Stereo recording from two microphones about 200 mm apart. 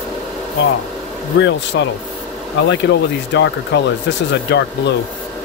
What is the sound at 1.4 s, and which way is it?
Speech, 65° left (ahead or behind).